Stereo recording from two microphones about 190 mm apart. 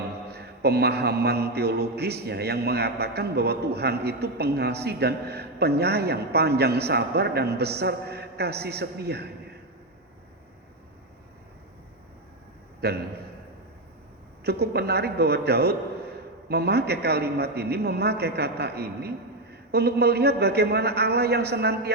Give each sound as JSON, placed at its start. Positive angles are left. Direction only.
{"t": 0.3, "sound": "a man's voice", "side_deg": -55}
{"t": 12.8, "sound": "a man's voice", "side_deg": -60}
{"t": 14.4, "sound": "a man's voice", "side_deg": -60}